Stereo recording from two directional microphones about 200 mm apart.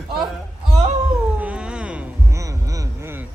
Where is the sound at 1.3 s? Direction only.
5° right (ahead or behind).